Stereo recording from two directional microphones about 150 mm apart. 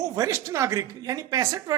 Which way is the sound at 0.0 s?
20° right (ahead or behind).